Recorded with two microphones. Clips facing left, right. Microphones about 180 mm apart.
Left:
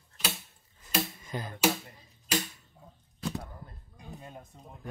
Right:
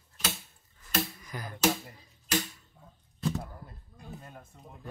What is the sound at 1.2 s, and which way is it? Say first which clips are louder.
Finger snapping: left 3 dB; 25° left (ahead or behind).